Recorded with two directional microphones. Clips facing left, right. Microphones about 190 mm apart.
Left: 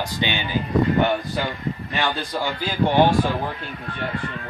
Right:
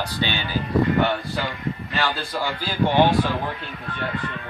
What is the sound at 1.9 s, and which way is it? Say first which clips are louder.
Speech: left 1 dB; 15° left (ahead or behind).